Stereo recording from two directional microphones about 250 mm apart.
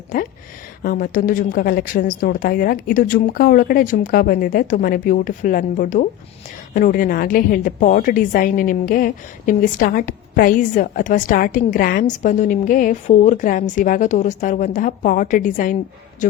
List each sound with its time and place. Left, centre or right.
0.8 s a woman's voice: left